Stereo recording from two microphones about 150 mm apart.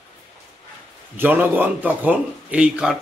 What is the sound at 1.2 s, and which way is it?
A man's voice, 10° right (ahead or behind).